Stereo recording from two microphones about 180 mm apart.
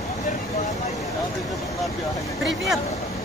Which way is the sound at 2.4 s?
Centre (ahead or behind).